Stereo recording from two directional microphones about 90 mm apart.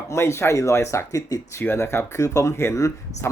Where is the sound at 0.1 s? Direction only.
30° left (ahead or behind).